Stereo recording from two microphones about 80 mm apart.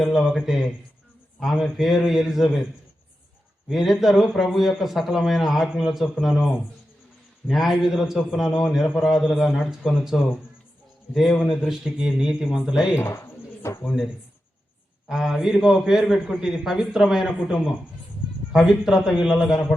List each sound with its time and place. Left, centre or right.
0.0 s a man's voice: centre
3.7 s a man's voice: centre
13.0 s a sound: left
13.8 s a man's voice: centre